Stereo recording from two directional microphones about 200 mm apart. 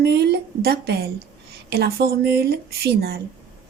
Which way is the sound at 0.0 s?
55° right (ahead or behind).